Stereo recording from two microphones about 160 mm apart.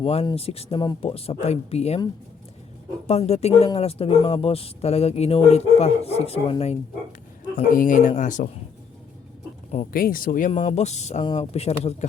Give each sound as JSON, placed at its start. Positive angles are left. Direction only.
{"t": 0.0, "sound": "speech", "side_deg": 40}
{"t": 3.1, "sound": "speech", "side_deg": 40}
{"t": 7.7, "sound": "speech", "side_deg": 55}
{"t": 9.7, "sound": "speech", "side_deg": 65}
{"t": 10.5, "sound": "speech", "side_deg": 45}